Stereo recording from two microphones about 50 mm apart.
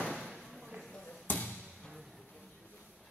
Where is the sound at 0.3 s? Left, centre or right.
Centre.